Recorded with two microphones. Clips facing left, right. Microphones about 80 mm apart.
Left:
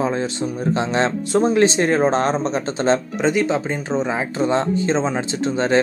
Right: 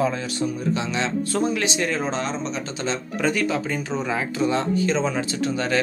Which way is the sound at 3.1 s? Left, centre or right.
Left.